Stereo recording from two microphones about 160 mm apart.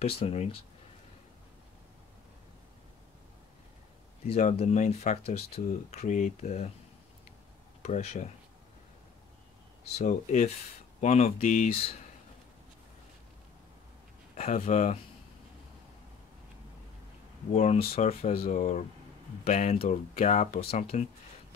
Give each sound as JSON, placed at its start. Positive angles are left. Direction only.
{"t": 0.2, "sound": "speech", "side_deg": 40}
{"t": 4.3, "sound": "speech", "side_deg": 45}
{"t": 7.8, "sound": "speech", "side_deg": 45}
{"t": 9.9, "sound": "speech", "side_deg": 50}
{"t": 14.3, "sound": "speech", "side_deg": 45}
{"t": 17.5, "sound": "speech", "side_deg": 45}